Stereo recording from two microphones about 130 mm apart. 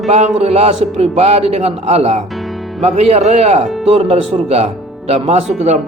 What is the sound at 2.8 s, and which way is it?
A man's voice, 55° right (ahead or behind).